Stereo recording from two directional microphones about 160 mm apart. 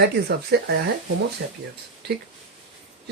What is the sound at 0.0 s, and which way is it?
Speech, 90° right.